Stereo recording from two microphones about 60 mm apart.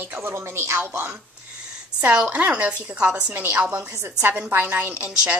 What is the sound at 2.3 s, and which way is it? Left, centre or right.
A woman's voice, right.